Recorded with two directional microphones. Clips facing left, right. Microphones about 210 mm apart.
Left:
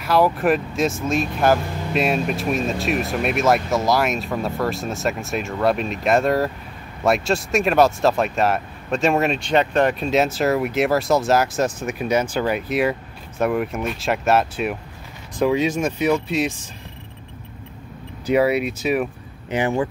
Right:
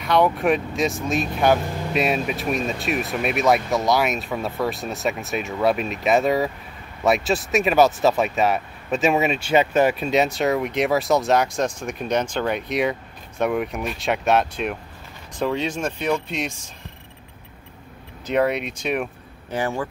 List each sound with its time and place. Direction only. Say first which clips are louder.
0.0 s speech: left 1 dB; 5° left (ahead or behind)
18.2 s speech: left 3 dB; 5° left (ahead or behind)
19.5 s speech: left 4 dB; 20° left (ahead or behind)